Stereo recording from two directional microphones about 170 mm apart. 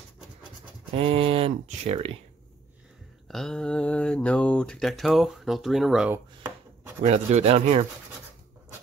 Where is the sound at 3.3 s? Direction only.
5° left (ahead or behind).